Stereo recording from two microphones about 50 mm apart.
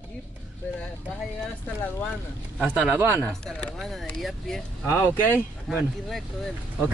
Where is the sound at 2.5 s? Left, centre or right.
Right.